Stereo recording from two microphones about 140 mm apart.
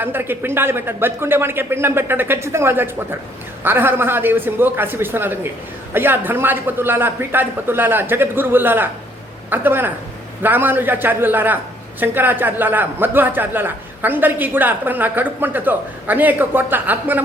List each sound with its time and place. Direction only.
0.0 s a man's voice: 15° right (ahead or behind)